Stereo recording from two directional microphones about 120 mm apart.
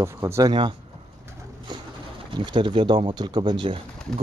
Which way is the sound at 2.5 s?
45° right (ahead or behind).